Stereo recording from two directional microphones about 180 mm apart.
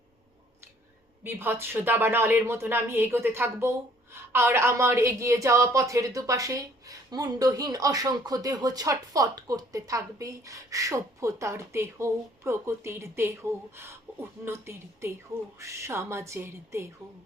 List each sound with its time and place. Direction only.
1.2 s a woman's voice: 10° right (ahead or behind)